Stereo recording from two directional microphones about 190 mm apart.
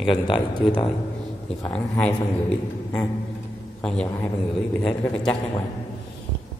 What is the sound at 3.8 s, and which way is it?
A man's voice, 5° left (ahead or behind).